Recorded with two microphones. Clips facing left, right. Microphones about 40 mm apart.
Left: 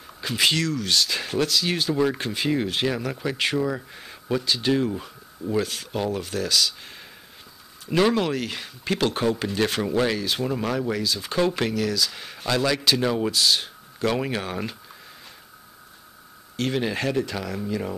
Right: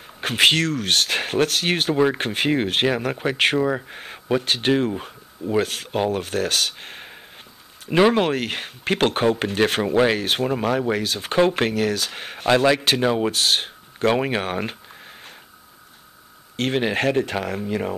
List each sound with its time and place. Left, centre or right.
0.2 s speech: right
9.8 s speech: right
10.1 s speech: right
10.4 s speech: right
13.0 s speech: right
13.3 s speech: right
16.5 s speech: right